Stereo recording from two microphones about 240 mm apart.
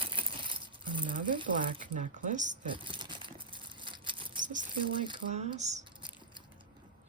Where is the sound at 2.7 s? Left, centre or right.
Centre.